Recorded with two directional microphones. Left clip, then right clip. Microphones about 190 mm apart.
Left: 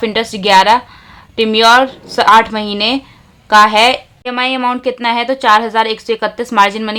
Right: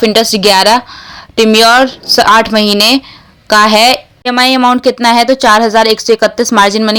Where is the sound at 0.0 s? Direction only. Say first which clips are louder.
Right 7 dB; 30° right (ahead or behind).